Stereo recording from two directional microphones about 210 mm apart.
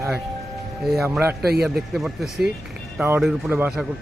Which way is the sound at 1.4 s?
50° right (ahead or behind).